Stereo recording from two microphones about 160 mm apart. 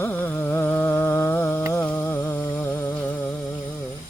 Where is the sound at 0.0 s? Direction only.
10° left (ahead or behind).